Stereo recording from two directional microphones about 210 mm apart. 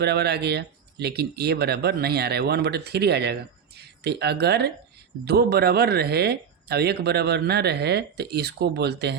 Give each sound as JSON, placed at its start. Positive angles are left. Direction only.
{"t": 0.0, "sound": "speech", "side_deg": -50}